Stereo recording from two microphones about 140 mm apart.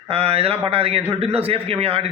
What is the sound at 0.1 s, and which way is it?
A man's voice, 45° right (ahead or behind).